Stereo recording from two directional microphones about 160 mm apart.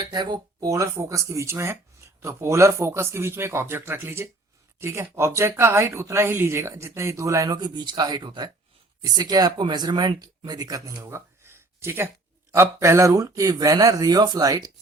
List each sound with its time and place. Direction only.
0.0 s speech: 25° right (ahead or behind)